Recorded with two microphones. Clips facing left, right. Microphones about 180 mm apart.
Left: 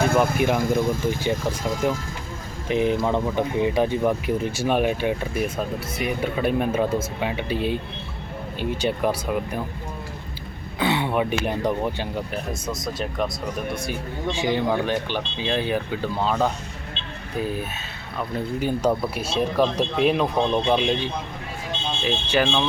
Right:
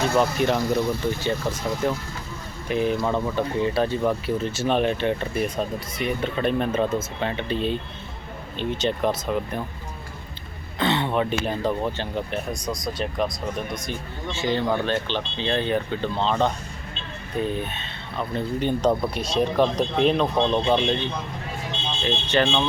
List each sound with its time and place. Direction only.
0.3 s speech: 10° left (ahead or behind)
0.6 s speech: 50° left (ahead or behind)
1.0 s speech: 15° left (ahead or behind)
10.8 s speech: 10° left (ahead or behind)